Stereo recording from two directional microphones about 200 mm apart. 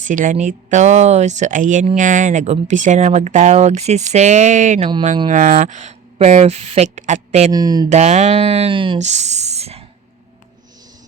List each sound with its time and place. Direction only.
0.0 s speech: 40° right (ahead or behind)
7.5 s speech: 20° right (ahead or behind)
7.9 s speech: 35° right (ahead or behind)